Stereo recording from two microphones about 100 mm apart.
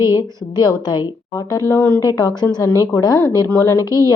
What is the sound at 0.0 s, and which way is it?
Speech, 30° right (ahead or behind).